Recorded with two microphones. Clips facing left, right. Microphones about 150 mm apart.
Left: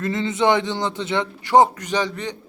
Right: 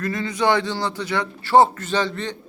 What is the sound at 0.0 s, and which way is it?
A man's voice, 25° left (ahead or behind).